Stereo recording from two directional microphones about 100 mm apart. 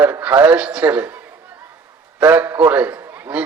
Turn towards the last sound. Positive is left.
turn(degrees=-20)  # may be behind; listen again after turning